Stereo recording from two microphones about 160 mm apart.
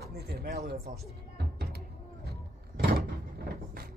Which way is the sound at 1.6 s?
80° right.